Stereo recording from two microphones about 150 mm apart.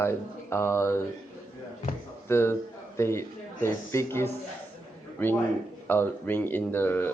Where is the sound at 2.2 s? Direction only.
15° left (ahead or behind).